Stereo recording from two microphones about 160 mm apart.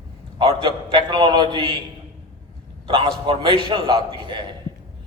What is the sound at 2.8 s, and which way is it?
A man's voice, 30° right (ahead or behind).